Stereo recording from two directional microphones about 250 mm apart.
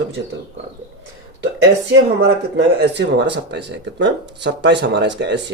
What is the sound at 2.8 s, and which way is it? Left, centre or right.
Speech, right.